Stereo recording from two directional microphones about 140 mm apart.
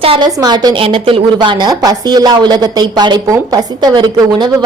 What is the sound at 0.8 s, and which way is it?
Speech, 40° right (ahead or behind).